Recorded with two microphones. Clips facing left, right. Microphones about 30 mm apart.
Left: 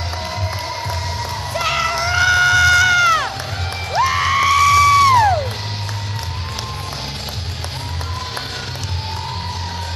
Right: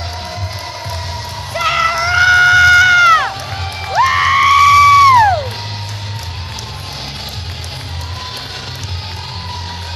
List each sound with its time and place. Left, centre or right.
1.5 s screaming: centre